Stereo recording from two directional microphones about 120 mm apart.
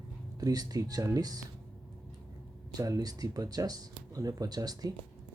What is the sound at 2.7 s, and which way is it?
Speech, 30° right (ahead or behind).